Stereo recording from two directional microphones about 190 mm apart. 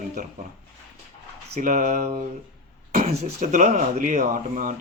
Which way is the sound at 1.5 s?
45° right (ahead or behind).